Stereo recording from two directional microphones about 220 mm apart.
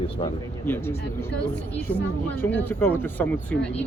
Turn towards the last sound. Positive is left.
turn(degrees=10)  # may be behind; listen again after turning